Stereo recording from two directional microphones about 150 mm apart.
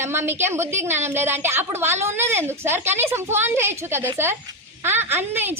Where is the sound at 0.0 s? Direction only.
15° right (ahead or behind).